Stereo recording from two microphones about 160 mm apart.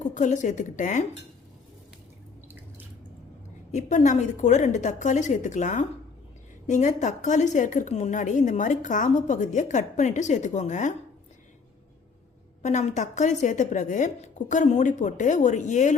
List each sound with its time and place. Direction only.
0.0 s a woman's voice: 50° left (ahead or behind)
3.7 s a woman's voice: 50° left (ahead or behind)
12.6 s a woman's voice: 45° left (ahead or behind)